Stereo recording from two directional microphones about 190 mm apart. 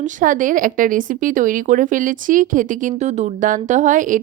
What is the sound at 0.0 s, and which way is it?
Speech, 45° right (ahead or behind).